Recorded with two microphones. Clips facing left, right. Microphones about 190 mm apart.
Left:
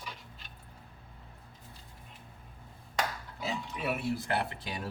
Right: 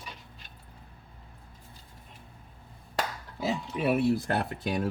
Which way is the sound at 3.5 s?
35° right (ahead or behind).